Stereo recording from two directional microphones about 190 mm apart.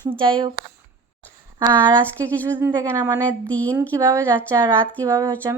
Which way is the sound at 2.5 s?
10° right (ahead or behind).